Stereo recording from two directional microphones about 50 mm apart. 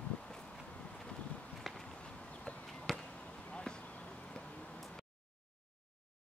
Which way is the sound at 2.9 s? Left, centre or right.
Centre.